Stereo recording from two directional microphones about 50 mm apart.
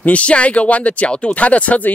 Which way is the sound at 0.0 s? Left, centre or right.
Left.